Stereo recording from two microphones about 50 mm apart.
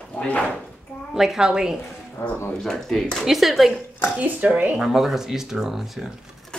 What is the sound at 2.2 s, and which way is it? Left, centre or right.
Speech, left.